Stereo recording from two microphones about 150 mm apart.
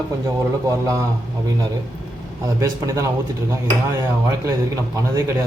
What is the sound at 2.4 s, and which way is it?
Speech, 20° right (ahead or behind).